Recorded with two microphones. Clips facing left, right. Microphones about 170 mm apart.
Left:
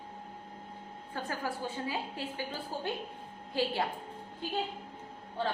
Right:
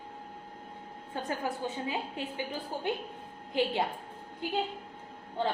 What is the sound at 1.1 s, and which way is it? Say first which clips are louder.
A woman's voice: right 2 dB; 20° right (ahead or behind).